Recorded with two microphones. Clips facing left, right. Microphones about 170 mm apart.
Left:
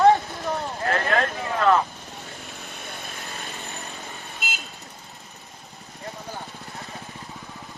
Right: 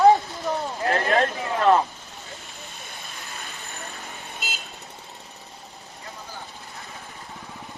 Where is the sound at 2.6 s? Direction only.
65° left (ahead or behind).